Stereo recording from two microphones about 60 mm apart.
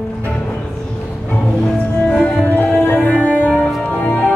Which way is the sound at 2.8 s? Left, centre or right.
Left.